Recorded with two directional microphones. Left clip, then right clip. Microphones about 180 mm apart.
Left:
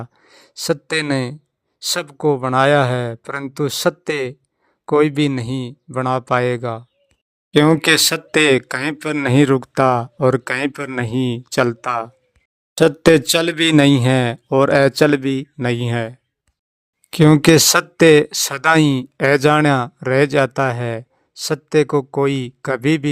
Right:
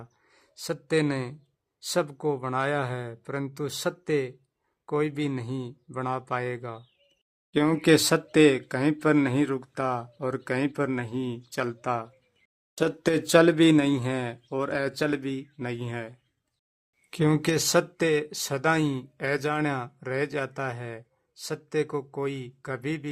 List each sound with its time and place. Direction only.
0.0 s a man's voice: 35° left (ahead or behind)